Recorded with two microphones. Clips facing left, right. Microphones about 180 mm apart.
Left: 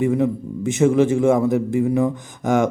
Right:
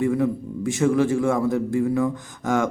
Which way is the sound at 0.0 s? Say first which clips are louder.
Left 2 dB; 20° left (ahead or behind).